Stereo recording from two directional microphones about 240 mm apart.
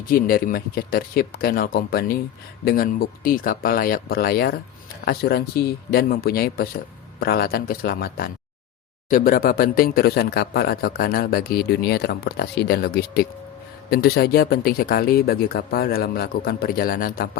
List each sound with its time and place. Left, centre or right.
0.1 s speech: left